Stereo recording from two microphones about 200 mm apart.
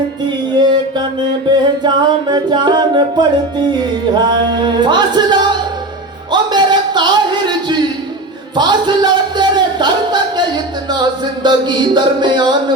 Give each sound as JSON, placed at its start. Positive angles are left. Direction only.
{"t": 0.6, "sound": "mantra", "side_deg": -20}
{"t": 1.6, "sound": "music", "side_deg": -20}
{"t": 6.3, "sound": "a sound", "side_deg": -20}